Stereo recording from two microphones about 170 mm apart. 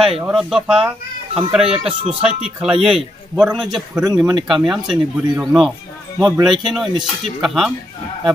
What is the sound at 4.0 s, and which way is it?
Speech, 20° right (ahead or behind).